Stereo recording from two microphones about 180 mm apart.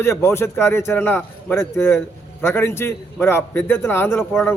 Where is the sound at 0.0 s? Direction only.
15° left (ahead or behind).